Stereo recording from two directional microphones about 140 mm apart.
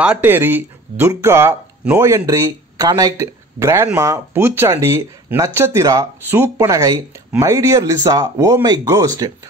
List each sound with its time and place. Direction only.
0.0 s speech: 10° right (ahead or behind); by 9.3 s 25° right (ahead or behind)